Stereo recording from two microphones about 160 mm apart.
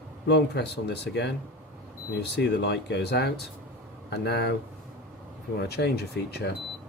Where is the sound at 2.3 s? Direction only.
90° left.